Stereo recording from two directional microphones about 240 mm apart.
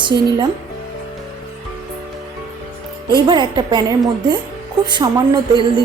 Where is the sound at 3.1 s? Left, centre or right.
Centre.